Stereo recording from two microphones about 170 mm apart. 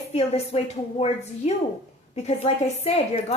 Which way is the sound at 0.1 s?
40° left (ahead or behind).